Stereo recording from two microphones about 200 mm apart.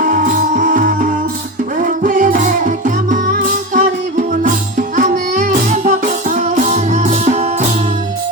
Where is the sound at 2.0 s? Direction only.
40° right (ahead or behind).